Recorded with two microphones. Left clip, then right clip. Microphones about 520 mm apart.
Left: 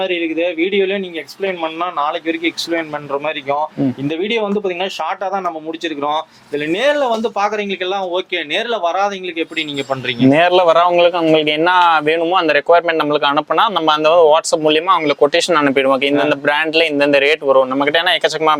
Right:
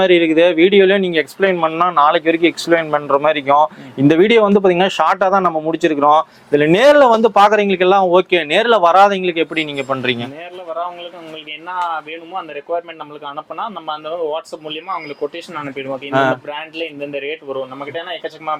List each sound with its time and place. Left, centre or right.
0.0 s speech: right
10.3 s speech: left